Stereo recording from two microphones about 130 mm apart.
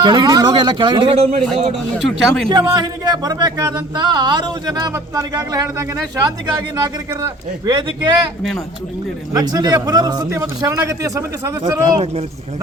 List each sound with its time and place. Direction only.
0.0 s speech: 35° right (ahead or behind)
2.0 s speech: centre (ahead or behind)
2.5 s speech: 30° right (ahead or behind)
7.7 s speech: 40° right (ahead or behind)
9.3 s a man's voice: 30° right (ahead or behind)